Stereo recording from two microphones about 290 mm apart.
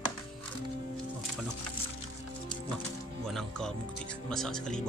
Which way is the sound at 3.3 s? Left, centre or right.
Centre.